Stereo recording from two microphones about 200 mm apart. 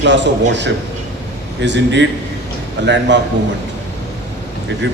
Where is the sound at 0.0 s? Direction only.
60° right (ahead or behind).